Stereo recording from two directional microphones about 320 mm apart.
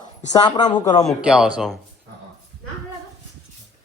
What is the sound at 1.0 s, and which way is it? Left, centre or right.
Speech, centre.